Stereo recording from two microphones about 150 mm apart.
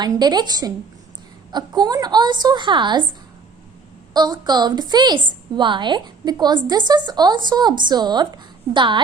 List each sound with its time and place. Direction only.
0.0 s a woman's voice: 30° right (ahead or behind)
4.1 s a woman's voice: 25° right (ahead or behind)